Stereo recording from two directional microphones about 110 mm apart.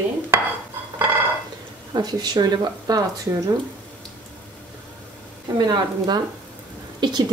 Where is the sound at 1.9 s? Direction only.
35° right (ahead or behind).